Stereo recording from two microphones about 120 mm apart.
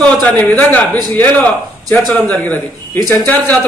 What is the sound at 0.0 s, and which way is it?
A man's voice, 10° left (ahead or behind).